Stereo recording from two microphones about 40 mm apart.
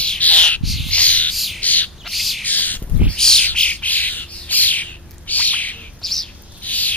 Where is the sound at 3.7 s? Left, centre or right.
Left.